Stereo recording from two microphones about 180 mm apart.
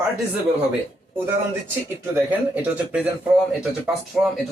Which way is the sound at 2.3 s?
10° right (ahead or behind).